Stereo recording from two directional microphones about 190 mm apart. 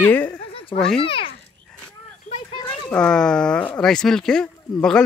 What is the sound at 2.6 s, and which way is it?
Speech, 5° left (ahead or behind).